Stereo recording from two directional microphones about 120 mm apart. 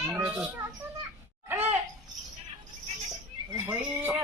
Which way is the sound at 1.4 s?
20° right (ahead or behind).